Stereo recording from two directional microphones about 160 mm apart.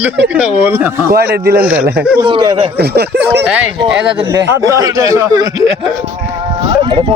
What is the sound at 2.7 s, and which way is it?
Speech, 90° right.